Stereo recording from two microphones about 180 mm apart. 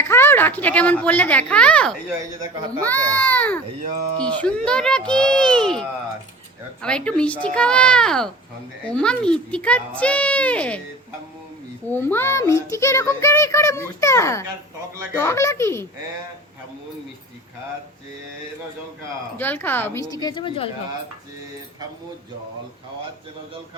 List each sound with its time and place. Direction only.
0.0 s a child's voice: 15° left (ahead or behind)
6.8 s a child's voice: 5° left (ahead or behind)
11.9 s a child's voice: 10° left (ahead or behind)
19.4 s a child's voice: 10° left (ahead or behind); by 20.7 s 25° left (ahead or behind)